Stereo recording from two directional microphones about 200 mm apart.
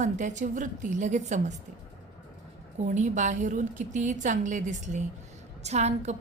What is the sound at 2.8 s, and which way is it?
A woman's voice, 40° right (ahead or behind).